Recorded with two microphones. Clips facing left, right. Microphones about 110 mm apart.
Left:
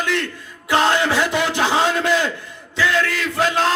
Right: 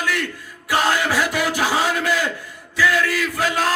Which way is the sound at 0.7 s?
20° left (ahead or behind).